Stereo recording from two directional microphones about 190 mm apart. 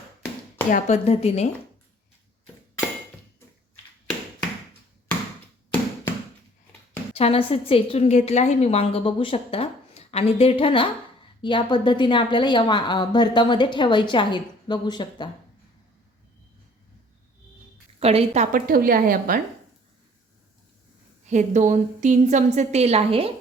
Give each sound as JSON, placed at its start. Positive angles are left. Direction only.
{"t": 0.7, "sound": "a woman's voice", "side_deg": 35}
{"t": 7.1, "sound": "a woman's voice", "side_deg": 30}
{"t": 18.0, "sound": "a woman's voice", "side_deg": -35}
{"t": 21.2, "sound": "a woman's voice", "side_deg": -40}